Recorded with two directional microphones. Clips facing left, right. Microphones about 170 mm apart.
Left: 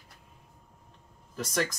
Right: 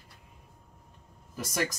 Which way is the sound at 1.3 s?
10° right (ahead or behind).